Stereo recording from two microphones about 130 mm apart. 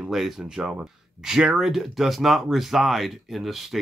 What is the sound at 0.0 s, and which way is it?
Speech, centre (ahead or behind).